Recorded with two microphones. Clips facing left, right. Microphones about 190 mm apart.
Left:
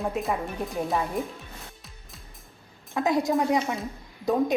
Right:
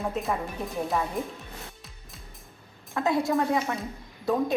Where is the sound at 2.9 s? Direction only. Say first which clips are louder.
Left 1 dB; 15° left (ahead or behind).